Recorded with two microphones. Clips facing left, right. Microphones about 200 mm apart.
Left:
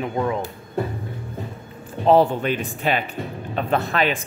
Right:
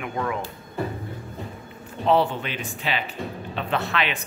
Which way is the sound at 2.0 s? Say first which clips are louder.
Left 5 dB; 40° left (ahead or behind).